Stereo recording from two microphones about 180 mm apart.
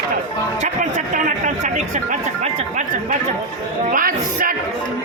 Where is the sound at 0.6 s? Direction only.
45° right (ahead or behind).